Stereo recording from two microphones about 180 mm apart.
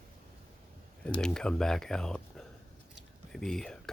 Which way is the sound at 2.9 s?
5° left (ahead or behind).